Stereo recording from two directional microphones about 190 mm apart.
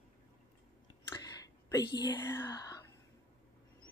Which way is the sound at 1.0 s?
15° left (ahead or behind).